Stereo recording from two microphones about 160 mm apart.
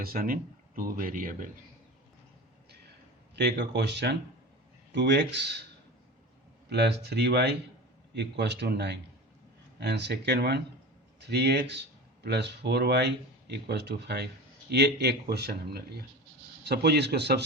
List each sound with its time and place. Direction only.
0.0 s speech: 65° right (ahead or behind)
3.3 s speech: 90° right
6.7 s speech: 90° right